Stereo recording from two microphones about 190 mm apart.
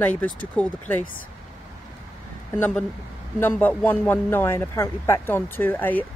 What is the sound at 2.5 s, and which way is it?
Speech, 10° left (ahead or behind).